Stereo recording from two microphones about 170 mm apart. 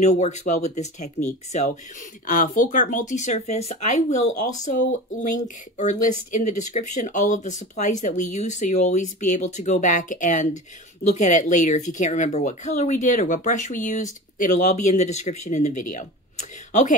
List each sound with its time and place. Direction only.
0.0 s speech: 40° left (ahead or behind)